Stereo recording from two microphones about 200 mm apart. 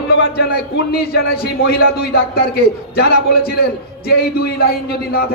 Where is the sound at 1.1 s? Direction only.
50° left (ahead or behind).